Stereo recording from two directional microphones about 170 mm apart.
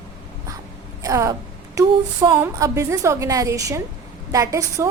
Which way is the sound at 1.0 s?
20° right (ahead or behind).